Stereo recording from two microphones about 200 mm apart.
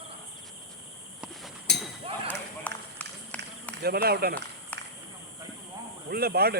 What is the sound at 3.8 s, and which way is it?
Speech, 50° right (ahead or behind).